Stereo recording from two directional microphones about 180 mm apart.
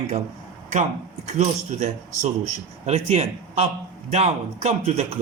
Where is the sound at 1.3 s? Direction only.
40° right (ahead or behind).